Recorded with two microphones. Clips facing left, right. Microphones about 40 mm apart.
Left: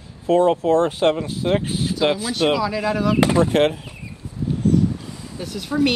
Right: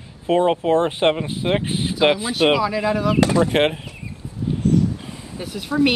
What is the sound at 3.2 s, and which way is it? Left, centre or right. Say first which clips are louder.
Speech: left 1 dB; left.